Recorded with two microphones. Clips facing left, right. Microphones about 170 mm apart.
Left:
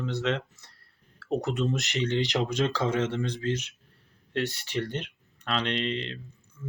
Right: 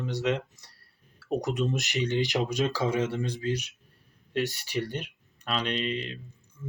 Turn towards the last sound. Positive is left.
turn(degrees=-10)  # may be behind; listen again after turning